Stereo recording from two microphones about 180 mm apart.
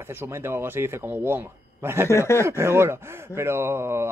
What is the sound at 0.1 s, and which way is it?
Speech, 15° right (ahead or behind).